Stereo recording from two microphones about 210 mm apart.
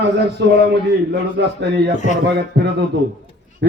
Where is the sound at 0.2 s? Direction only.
55° right (ahead or behind).